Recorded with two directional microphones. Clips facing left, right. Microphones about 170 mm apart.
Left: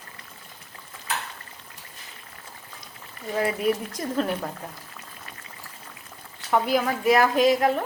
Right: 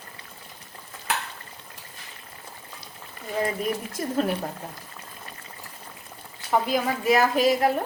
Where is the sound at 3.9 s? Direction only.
5° right (ahead or behind).